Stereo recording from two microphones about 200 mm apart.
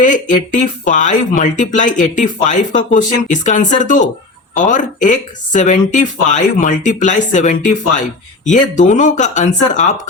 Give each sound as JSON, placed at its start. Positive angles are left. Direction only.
{"t": 0.0, "sound": "speech", "side_deg": 40}